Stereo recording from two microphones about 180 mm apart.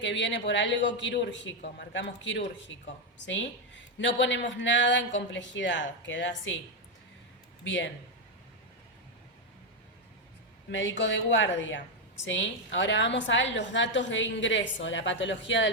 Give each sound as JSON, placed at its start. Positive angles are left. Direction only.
{"t": 0.0, "sound": "a woman's voice", "side_deg": 90}
{"t": 7.6, "sound": "speech", "side_deg": 90}
{"t": 10.7, "sound": "a woman's voice", "side_deg": 90}